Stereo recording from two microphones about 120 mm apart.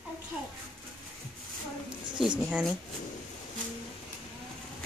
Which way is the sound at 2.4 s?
Centre (ahead or behind).